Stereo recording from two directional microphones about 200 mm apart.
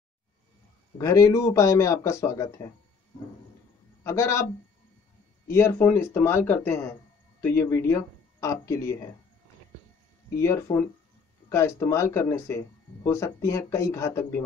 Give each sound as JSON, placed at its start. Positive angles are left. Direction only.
{"t": 0.9, "sound": "speech", "side_deg": 15}
{"t": 4.0, "sound": "speech", "side_deg": 15}
{"t": 5.5, "sound": "speech", "side_deg": 15}
{"t": 10.4, "sound": "speech", "side_deg": 15}